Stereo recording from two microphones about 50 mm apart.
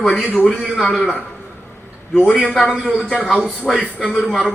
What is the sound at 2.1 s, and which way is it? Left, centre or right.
Speech, left.